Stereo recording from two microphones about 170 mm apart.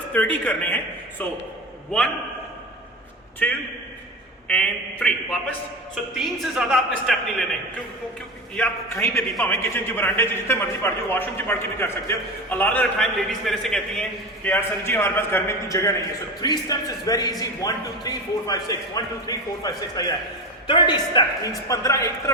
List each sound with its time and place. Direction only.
0.1 s a man's voice: 10° left (ahead or behind)
3.4 s a man's voice: 10° left (ahead or behind)
8.5 s a man's voice: 10° left (ahead or behind)